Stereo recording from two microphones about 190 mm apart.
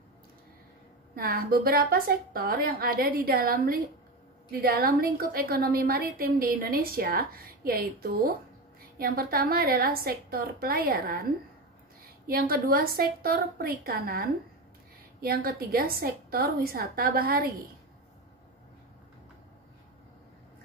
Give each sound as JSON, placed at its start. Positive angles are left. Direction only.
{"t": 1.1, "sound": "a woman's voice", "side_deg": -50}
{"t": 12.3, "sound": "a woman's voice", "side_deg": -50}